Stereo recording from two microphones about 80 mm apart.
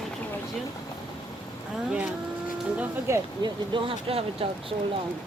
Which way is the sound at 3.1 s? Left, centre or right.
Right.